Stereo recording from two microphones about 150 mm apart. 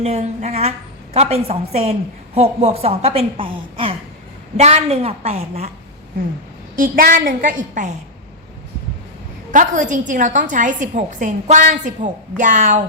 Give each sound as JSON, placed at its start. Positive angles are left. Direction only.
{"t": 0.0, "sound": "a woman's voice", "side_deg": -45}
{"t": 4.5, "sound": "a woman's voice", "side_deg": -45}
{"t": 6.7, "sound": "a woman's voice", "side_deg": -65}
{"t": 9.5, "sound": "a woman's voice", "side_deg": -55}